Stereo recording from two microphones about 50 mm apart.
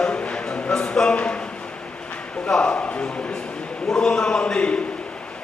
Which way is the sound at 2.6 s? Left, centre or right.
Left.